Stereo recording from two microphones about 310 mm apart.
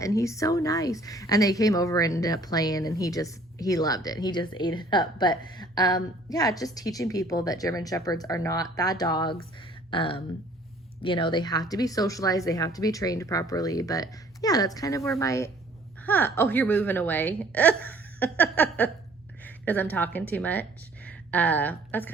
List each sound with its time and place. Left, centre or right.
0.0 s a woman's voice: centre